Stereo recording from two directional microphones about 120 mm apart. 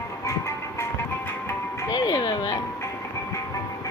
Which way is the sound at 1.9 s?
35° left (ahead or behind).